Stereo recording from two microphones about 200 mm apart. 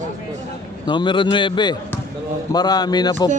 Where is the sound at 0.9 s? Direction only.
25° left (ahead or behind).